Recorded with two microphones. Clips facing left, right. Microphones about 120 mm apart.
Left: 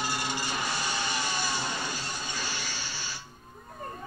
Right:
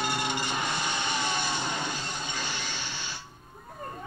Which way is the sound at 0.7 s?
5° left (ahead or behind).